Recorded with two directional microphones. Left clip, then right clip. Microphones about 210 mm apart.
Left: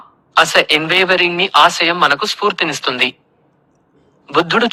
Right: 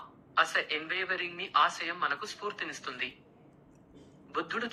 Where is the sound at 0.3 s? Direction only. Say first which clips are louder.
Left 17 dB; 45° left (ahead or behind).